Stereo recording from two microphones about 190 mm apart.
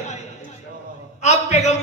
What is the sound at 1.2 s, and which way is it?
Speech, 35° left (ahead or behind).